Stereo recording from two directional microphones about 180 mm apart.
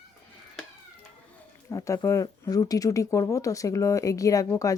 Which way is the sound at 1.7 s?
20° left (ahead or behind).